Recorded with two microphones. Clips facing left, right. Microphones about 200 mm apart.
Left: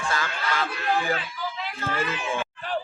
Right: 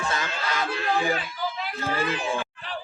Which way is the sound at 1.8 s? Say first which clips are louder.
Right 2 dB; 35° right (ahead or behind).